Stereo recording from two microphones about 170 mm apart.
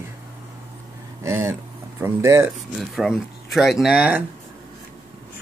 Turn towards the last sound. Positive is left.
turn(degrees=-5)  # may be behind; listen again after turning